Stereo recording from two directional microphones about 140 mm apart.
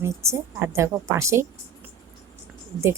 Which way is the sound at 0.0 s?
20° right (ahead or behind).